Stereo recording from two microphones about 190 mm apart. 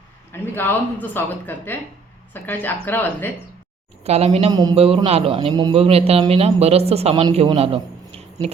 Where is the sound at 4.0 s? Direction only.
35° right (ahead or behind).